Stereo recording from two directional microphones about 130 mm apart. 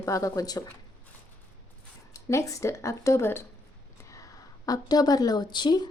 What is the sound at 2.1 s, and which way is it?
A woman's voice, 25° left (ahead or behind).